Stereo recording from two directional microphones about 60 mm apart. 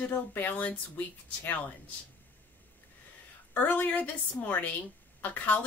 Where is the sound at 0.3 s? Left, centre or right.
Left.